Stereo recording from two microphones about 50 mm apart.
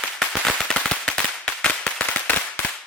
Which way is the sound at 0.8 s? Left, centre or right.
Centre.